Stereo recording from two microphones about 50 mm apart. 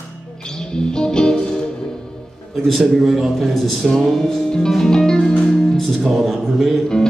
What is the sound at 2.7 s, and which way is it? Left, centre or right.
Speech, centre.